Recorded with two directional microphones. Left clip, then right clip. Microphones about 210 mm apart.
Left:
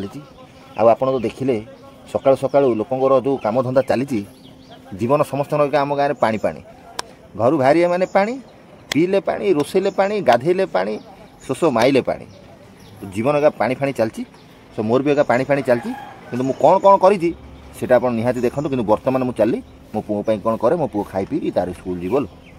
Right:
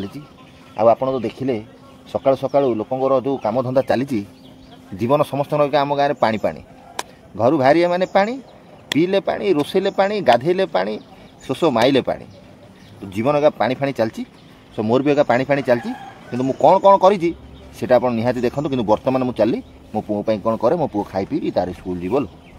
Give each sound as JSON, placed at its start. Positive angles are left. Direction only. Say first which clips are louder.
{"t": 0.7, "sound": "a man's voice", "louder": "left 1 dB", "side_deg": 15}
{"t": 3.4, "sound": "a man's voice", "louder": "left 1 dB", "side_deg": 15}
{"t": 13.1, "sound": "a man's voice", "louder": "even", "side_deg": 5}